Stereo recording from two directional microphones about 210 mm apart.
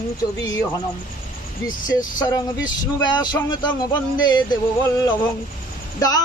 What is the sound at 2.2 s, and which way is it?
Speech, 15° left (ahead or behind).